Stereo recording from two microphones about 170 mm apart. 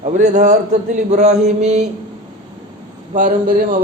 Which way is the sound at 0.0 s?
45° right (ahead or behind).